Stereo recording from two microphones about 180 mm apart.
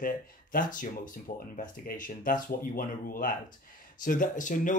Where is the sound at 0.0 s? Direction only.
50° left (ahead or behind).